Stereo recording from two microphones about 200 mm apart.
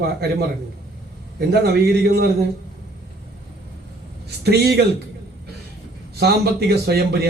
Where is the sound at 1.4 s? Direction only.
55° right (ahead or behind).